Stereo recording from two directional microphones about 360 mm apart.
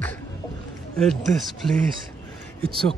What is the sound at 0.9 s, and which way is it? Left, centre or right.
Speech, centre.